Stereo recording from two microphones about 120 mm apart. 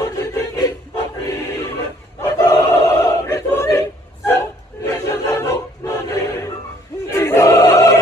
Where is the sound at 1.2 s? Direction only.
25° left (ahead or behind).